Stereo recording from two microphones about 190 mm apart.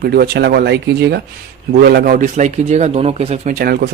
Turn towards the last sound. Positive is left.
turn(degrees=-55)  # may be behind; listen again after turning